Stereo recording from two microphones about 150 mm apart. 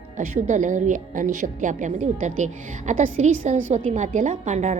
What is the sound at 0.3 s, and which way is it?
A woman's voice, 55° right (ahead or behind).